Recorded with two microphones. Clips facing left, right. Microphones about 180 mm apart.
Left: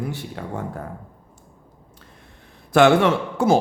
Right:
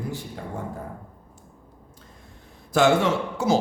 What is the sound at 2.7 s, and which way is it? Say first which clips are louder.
Speech: left 4 dB; 65° left (ahead or behind).